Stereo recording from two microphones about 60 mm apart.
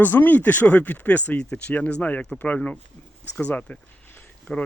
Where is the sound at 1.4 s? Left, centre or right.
Centre; by 4.3 s left.